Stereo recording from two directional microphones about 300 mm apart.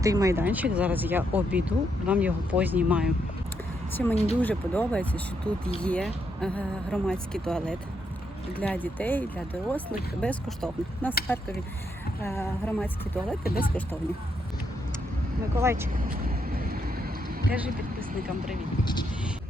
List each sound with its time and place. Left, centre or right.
0.0 s speech: centre
13.4 s speech: left
15.5 s speech: centre
15.9 s vehicle: right